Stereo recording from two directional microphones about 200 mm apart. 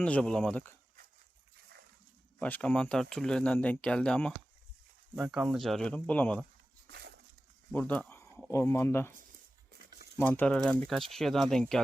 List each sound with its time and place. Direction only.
0.0 s speech: 5° left (ahead or behind)
2.4 s speech: 5° left (ahead or behind)
6.8 s a sound: 55° right (ahead or behind)
7.7 s speech: 10° left (ahead or behind)
10.2 s speech: 10° left (ahead or behind)